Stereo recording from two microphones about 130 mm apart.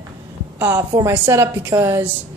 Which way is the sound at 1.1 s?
15° right (ahead or behind).